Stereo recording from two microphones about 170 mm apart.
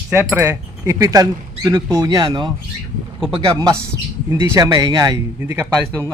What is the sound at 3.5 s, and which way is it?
Speech, 20° right (ahead or behind).